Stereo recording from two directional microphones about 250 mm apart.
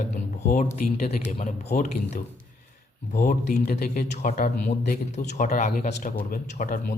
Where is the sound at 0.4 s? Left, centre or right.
Left.